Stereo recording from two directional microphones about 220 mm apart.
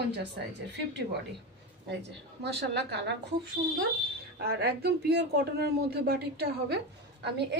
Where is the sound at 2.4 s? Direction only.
50° right (ahead or behind).